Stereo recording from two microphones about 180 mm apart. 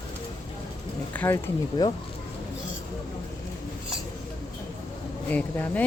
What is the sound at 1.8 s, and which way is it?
Speech, 20° left (ahead or behind).